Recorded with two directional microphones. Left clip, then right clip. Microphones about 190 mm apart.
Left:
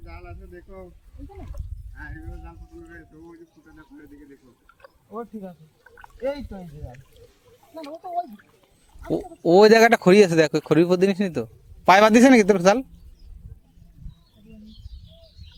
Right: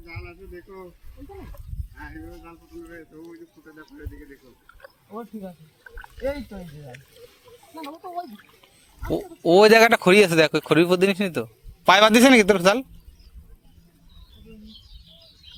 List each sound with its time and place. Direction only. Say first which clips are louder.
0.0 s a sound: right 3 dB; 50° left (ahead or behind)
2.0 s speech: right 1 dB; 45° left (ahead or behind)
5.2 s speech: left 1 dB; 15° right (ahead or behind)
9.0 s speech: even; 25° left (ahead or behind)